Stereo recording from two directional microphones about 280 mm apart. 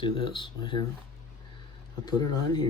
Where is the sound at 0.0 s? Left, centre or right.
Centre.